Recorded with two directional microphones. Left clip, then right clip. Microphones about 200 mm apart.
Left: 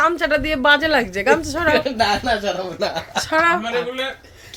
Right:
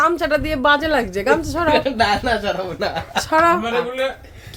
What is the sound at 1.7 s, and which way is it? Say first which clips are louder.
Speech: right 3 dB; 30° left (ahead or behind).